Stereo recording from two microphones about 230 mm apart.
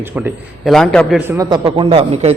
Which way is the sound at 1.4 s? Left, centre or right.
Centre.